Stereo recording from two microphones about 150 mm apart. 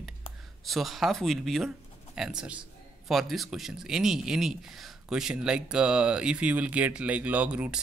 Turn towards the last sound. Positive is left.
turn(degrees=-10)  # may be behind; listen again after turning